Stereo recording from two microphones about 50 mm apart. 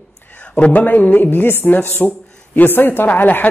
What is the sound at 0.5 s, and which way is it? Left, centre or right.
Speech, left.